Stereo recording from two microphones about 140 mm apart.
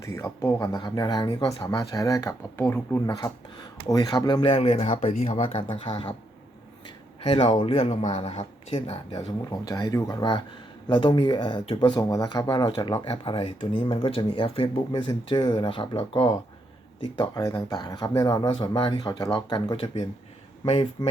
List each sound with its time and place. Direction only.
0.0 s speech: 20° left (ahead or behind); by 5.4 s 55° left (ahead or behind)
5.4 s speech: 45° left (ahead or behind)
7.3 s speech: 45° left (ahead or behind)
9.1 s speech: 30° left (ahead or behind)
19.7 s speech: 45° left (ahead or behind)